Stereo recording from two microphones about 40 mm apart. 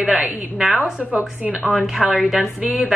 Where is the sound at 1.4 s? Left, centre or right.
Right.